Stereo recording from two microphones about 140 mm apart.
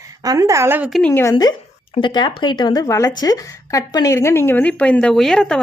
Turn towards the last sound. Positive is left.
turn(degrees=5)  # may be behind; listen again after turning